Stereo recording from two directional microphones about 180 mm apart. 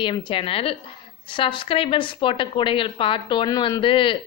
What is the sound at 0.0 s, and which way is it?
A woman's voice, 30° left (ahead or behind).